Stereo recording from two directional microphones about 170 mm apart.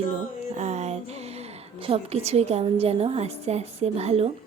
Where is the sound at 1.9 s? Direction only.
40° right (ahead or behind).